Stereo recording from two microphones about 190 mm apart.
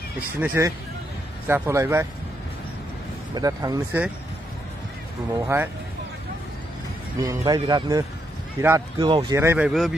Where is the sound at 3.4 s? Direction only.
20° right (ahead or behind).